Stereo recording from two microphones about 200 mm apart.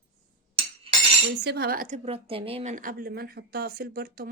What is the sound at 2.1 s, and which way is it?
Speech, 30° right (ahead or behind).